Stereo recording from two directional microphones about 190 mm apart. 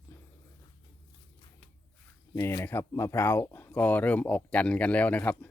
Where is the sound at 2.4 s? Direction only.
15° left (ahead or behind).